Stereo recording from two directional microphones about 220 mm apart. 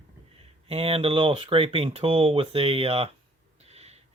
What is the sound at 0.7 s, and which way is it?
Speech, 25° right (ahead or behind).